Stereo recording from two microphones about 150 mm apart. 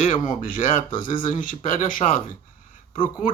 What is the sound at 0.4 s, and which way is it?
Speech, 65° left (ahead or behind).